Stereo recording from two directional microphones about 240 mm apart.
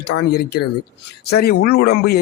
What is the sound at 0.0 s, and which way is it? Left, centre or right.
A man's voice, left.